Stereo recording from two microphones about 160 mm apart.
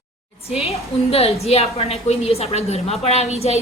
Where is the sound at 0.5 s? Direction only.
40° left (ahead or behind).